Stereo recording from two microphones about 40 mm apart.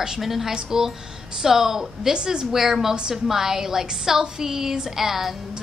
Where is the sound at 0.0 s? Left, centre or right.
Centre.